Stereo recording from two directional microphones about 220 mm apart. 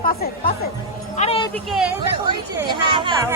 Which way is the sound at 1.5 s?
Centre (ahead or behind).